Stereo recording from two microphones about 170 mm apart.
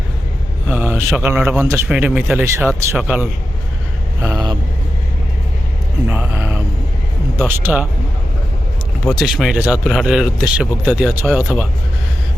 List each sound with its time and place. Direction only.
0.7 s a man's voice: 10° right (ahead or behind)
4.2 s vehicle: 20° right (ahead or behind)
6.1 s a sound: 10° right (ahead or behind)
7.3 s a man's voice: 10° right (ahead or behind)
9.0 s a man's voice: centre (ahead or behind)